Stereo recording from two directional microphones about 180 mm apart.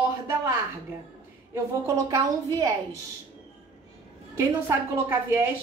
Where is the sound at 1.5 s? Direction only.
20° right (ahead or behind).